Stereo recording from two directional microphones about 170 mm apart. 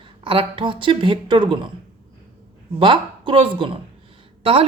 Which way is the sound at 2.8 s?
30° right (ahead or behind).